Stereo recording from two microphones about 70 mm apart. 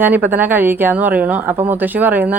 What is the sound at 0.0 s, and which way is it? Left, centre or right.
Speech, right.